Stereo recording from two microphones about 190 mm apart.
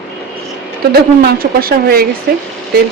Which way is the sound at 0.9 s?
55° right (ahead or behind).